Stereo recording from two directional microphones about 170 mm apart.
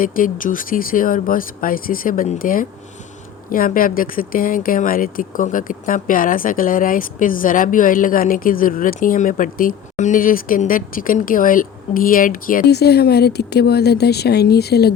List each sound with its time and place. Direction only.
0.0 s speech: 55° left (ahead or behind); by 14.9 s 70° left (ahead or behind)